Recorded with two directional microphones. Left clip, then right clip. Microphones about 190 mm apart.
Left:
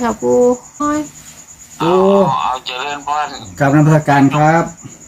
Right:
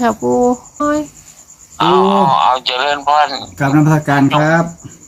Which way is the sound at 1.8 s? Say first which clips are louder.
Right 1 dB; 55° right (ahead or behind).